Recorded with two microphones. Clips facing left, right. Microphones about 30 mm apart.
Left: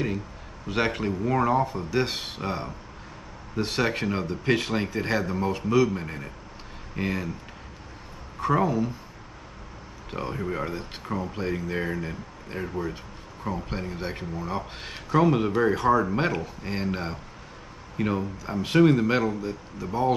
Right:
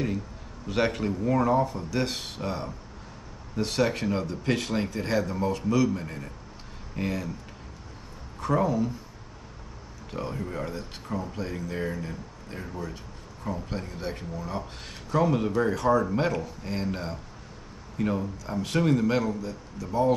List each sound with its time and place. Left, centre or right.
0.7 s speech: centre
8.4 s speech: left
10.1 s speech: left